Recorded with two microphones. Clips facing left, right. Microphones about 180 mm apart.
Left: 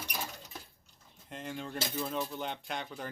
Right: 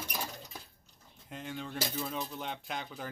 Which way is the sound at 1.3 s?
Centre (ahead or behind).